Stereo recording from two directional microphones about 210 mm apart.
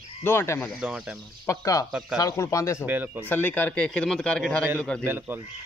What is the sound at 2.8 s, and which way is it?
Speech, 10° right (ahead or behind).